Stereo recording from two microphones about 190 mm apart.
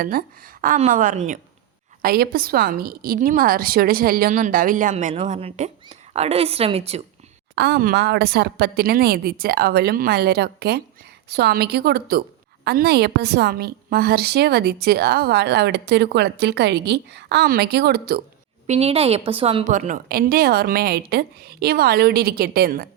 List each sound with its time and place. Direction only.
0.0 s a woman's voice: 50° right (ahead or behind)
2.0 s a woman's voice: 50° right (ahead or behind); by 7.0 s 30° right (ahead or behind)
7.5 s a woman's voice: 60° right (ahead or behind)
18.7 s a woman's voice: 35° right (ahead or behind); by 22.9 s 50° right (ahead or behind)